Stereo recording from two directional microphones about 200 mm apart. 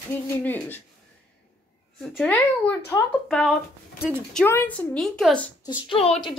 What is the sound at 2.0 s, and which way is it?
A woman's voice, 5° left (ahead or behind).